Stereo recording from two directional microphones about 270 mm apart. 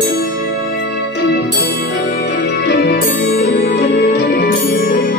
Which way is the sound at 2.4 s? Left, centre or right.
Left.